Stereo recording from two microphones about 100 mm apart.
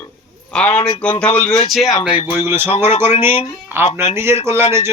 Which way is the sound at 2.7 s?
90° left.